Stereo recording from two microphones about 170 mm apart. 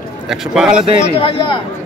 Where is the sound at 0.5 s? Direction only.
5° right (ahead or behind).